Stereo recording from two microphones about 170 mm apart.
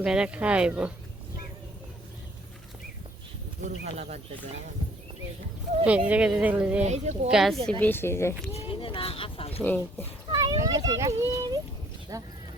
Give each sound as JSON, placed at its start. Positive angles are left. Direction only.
{"t": 0.0, "sound": "speech", "side_deg": -5}
{"t": 3.6, "sound": "speech", "side_deg": -40}
{"t": 5.8, "sound": "speech", "side_deg": -5}
{"t": 6.8, "sound": "speech", "side_deg": -40}
{"t": 7.3, "sound": "speech", "side_deg": 0}
{"t": 7.8, "sound": "speech", "side_deg": 10}
{"t": 8.5, "sound": "speech", "side_deg": 30}
{"t": 9.6, "sound": "speech", "side_deg": 10}
{"t": 10.3, "sound": "a child's voice", "side_deg": -20}